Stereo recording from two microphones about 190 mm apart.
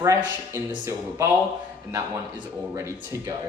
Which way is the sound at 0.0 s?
15° right (ahead or behind).